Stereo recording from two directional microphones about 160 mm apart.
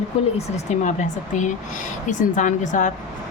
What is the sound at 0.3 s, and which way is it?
Speech, 45° left (ahead or behind).